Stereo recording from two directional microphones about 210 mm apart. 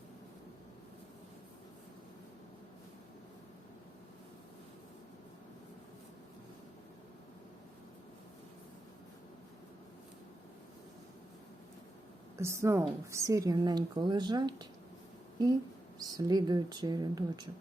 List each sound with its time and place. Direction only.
12.4 s a woman's voice: 10° right (ahead or behind)
16.0 s a woman's voice: 15° right (ahead or behind)